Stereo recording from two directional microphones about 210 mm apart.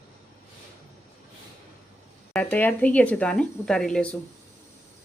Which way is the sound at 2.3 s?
5° left (ahead or behind).